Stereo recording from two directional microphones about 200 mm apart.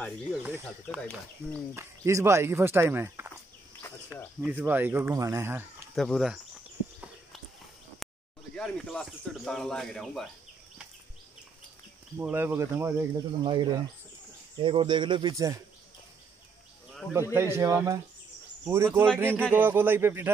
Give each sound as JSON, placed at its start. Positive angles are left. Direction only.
{"t": 0.9, "sound": "speech", "side_deg": 5}
{"t": 1.8, "sound": "speech", "side_deg": -15}
{"t": 4.4, "sound": "speech", "side_deg": -10}
{"t": 5.9, "sound": "speech", "side_deg": 0}
{"t": 8.0, "sound": "a sound", "side_deg": 0}
{"t": 8.5, "sound": "speech", "side_deg": 5}
{"t": 12.2, "sound": "speech", "side_deg": -10}
{"t": 13.4, "sound": "speech", "side_deg": -25}
{"t": 17.1, "sound": "speech", "side_deg": -15}